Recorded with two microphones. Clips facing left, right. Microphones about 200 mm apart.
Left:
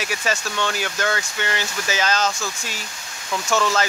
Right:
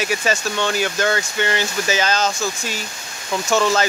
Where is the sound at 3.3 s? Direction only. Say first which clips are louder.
Right 3 dB; 25° right (ahead or behind).